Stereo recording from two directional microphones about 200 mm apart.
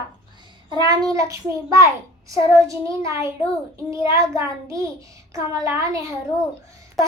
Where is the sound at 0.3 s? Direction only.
20° right (ahead or behind).